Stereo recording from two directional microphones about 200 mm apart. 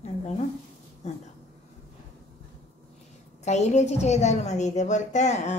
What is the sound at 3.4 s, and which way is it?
A woman's voice, 35° left (ahead or behind).